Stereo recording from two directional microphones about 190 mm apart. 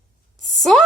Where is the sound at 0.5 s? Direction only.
Centre (ahead or behind).